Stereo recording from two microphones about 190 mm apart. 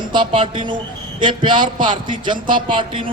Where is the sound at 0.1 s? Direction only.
25° right (ahead or behind).